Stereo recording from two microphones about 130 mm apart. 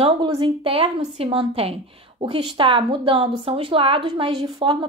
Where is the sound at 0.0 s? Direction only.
45° right (ahead or behind).